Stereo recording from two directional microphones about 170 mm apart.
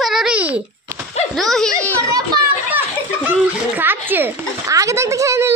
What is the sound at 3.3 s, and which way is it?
A child's voice, 10° right (ahead or behind).